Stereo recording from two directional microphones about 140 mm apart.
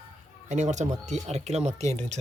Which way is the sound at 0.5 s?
55° right (ahead or behind).